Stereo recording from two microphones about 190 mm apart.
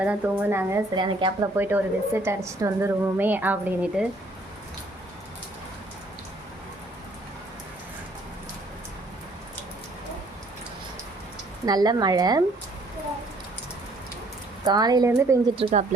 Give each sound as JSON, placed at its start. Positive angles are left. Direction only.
{"t": 0.0, "sound": "a woman's voice", "side_deg": -10}
{"t": 0.9, "sound": "speech", "side_deg": -25}
{"t": 1.5, "sound": "a woman's voice", "side_deg": -10}
{"t": 11.6, "sound": "speech", "side_deg": -20}
{"t": 14.6, "sound": "speech", "side_deg": -20}
{"t": 15.5, "sound": "speech", "side_deg": -35}